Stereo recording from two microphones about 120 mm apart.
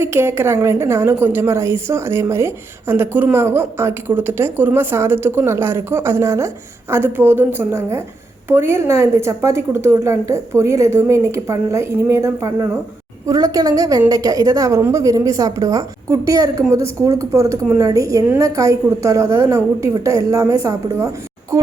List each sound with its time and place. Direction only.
0.0 s a woman's voice: 20° right (ahead or behind)